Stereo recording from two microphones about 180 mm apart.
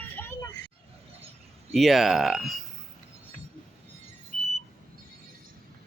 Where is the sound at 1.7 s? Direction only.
Centre (ahead or behind).